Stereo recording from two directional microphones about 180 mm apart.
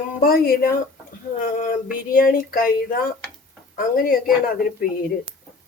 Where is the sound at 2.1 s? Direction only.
55° left (ahead or behind).